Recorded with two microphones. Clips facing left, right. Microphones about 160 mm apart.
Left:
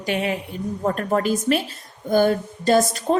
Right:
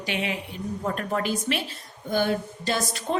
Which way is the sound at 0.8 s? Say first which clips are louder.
Left 6 dB; 45° left (ahead or behind).